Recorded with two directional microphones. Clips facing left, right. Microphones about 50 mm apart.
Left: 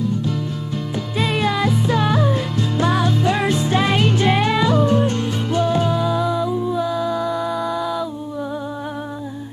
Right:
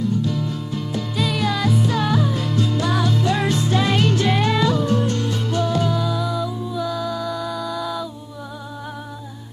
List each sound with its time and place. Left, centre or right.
1.1 s music: left
4.7 s music: left
7.8 s a sound: centre